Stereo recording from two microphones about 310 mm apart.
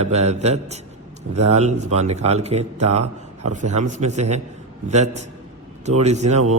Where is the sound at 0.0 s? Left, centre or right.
Right.